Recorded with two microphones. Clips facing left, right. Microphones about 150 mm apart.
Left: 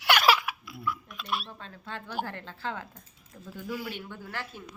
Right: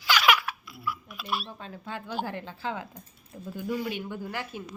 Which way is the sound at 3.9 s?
15° right (ahead or behind).